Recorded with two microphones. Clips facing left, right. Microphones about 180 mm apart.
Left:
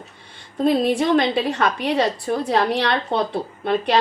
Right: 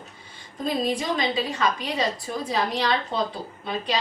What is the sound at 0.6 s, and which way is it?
A woman's voice, 65° left (ahead or behind).